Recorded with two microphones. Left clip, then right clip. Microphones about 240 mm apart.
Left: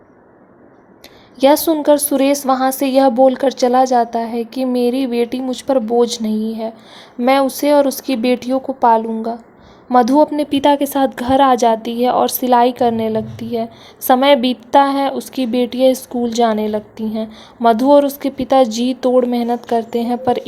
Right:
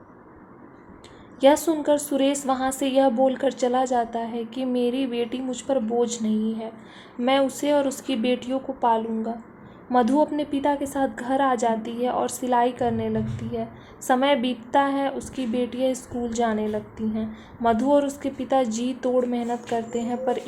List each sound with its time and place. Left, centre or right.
1.4 s a woman's voice: left